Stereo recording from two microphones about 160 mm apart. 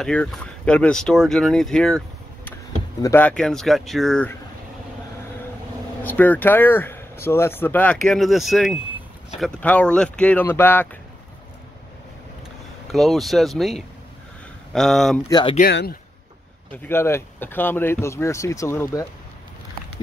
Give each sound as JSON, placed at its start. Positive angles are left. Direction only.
{"t": 0.0, "sound": "speech", "side_deg": 5}
{"t": 3.0, "sound": "speech", "side_deg": 15}
{"t": 6.0, "sound": "speech", "side_deg": 10}
{"t": 12.8, "sound": "speech", "side_deg": 0}
{"t": 15.2, "sound": "speech", "side_deg": 25}
{"t": 15.7, "sound": "a man's voice", "side_deg": 90}
{"t": 16.7, "sound": "speech", "side_deg": 15}